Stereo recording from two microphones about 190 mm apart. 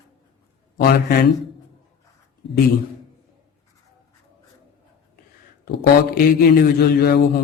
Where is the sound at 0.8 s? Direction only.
55° left (ahead or behind).